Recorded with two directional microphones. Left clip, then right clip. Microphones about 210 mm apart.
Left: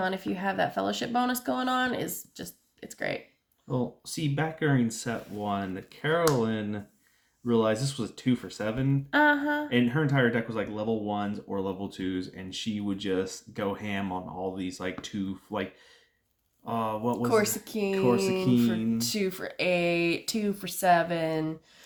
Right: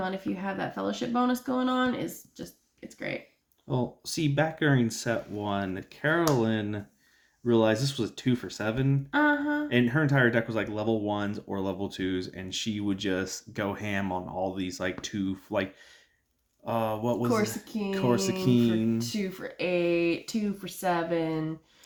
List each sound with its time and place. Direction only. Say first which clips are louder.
0.0 s speech: left 3 dB; 50° left (ahead or behind)
3.7 s speech: right 1 dB; 40° right (ahead or behind)
9.0 s female singing: left 3 dB; 50° left (ahead or behind)
9.6 s speech: right 1 dB; 40° right (ahead or behind)
16.6 s speech: right 1 dB; 40° right (ahead or behind)
17.4 s speech: left 2 dB; 50° left (ahead or behind)
18.1 s speech: left 1 dB; 50° right (ahead or behind)
18.9 s speech: left 3 dB; 50° left (ahead or behind)